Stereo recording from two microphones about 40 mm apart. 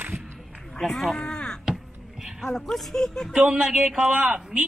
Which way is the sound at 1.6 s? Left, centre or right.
Centre.